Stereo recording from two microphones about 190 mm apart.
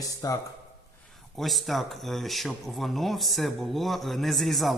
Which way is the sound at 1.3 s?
Centre (ahead or behind).